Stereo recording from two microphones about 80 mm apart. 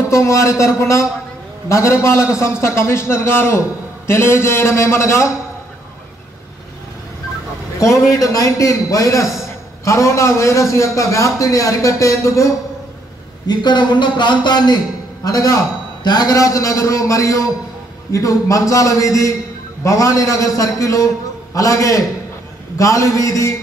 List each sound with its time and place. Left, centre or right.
0.1 s a man's voice: left
7.8 s a man's voice: left
13.5 s speech: left
15.2 s a man's voice: left
16.0 s a man's voice: left